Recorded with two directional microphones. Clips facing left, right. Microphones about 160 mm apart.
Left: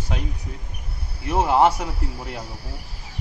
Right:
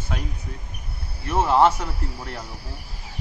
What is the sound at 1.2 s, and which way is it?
A man's voice, 10° left (ahead or behind).